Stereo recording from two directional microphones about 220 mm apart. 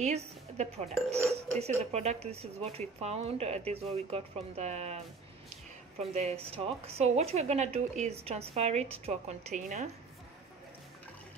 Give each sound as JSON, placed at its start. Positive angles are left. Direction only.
{"t": 0.0, "sound": "speech", "side_deg": -30}